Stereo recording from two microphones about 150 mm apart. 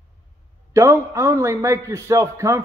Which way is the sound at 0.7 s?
20° right (ahead or behind).